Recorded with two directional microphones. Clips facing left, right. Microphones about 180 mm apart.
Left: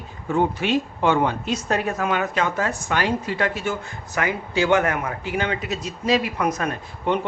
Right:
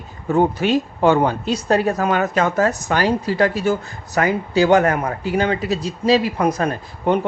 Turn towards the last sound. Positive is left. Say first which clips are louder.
# right 4 dB
turn(degrees=-35)  # may be behind; listen again after turning